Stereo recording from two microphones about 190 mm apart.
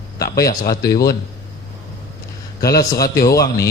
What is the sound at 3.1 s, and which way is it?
Speech, 55° left (ahead or behind).